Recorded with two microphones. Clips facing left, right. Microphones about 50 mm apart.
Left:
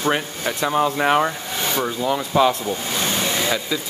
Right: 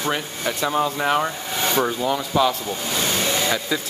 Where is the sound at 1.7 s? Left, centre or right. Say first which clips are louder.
Right 1 dB; centre.